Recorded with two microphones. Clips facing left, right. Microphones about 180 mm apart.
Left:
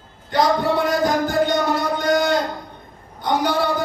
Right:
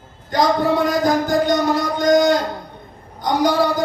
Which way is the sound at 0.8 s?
40° right (ahead or behind).